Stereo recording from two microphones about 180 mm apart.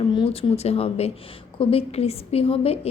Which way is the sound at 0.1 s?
30° left (ahead or behind).